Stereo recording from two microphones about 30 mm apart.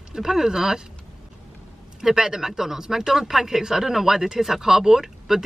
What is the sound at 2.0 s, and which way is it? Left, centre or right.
Speech, centre.